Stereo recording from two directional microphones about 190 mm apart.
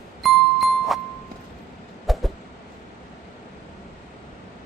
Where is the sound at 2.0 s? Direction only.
Centre (ahead or behind).